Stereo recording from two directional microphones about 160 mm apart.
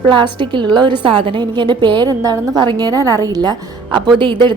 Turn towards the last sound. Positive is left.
turn(degrees=-30)  # may be behind; listen again after turning